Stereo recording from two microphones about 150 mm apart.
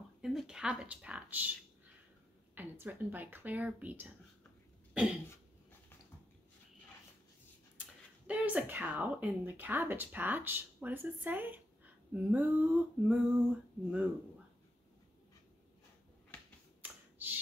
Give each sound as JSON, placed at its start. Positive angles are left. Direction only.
{"t": 0.2, "sound": "speech", "side_deg": 0}
{"t": 2.5, "sound": "speech", "side_deg": -10}
{"t": 8.3, "sound": "speech", "side_deg": -10}
{"t": 16.8, "sound": "finger snapping", "side_deg": -10}